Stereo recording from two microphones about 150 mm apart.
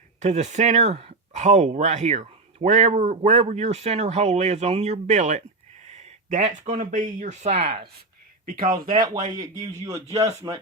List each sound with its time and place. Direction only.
0.2 s speech: 50° right (ahead or behind)
8.4 s speech: 70° right (ahead or behind)
10.4 s speech: 30° right (ahead or behind)